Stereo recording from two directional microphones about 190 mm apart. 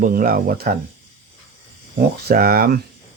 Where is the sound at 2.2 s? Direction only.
50° right (ahead or behind).